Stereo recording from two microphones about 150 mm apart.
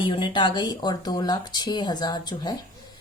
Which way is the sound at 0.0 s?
35° left (ahead or behind).